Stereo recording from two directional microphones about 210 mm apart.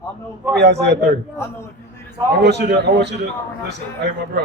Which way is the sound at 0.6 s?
55° right (ahead or behind).